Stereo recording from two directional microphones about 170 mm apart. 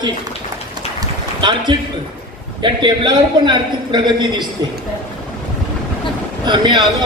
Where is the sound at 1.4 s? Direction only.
25° right (ahead or behind).